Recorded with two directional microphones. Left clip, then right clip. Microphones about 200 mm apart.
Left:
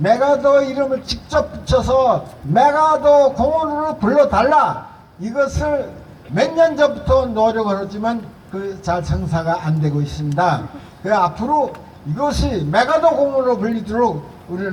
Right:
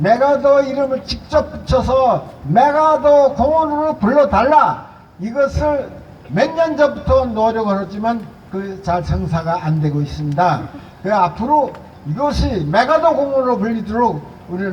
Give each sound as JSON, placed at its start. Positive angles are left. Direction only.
{"t": 0.0, "sound": "a man's voice", "side_deg": 15}